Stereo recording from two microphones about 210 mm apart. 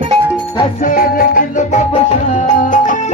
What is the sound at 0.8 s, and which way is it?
Music, 40° left (ahead or behind).